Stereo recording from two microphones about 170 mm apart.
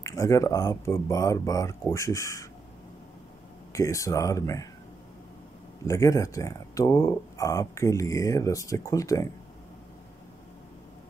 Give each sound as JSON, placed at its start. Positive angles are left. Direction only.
{"t": 0.0, "sound": "speech", "side_deg": 20}
{"t": 3.7, "sound": "speech", "side_deg": 20}
{"t": 5.9, "sound": "speech", "side_deg": 20}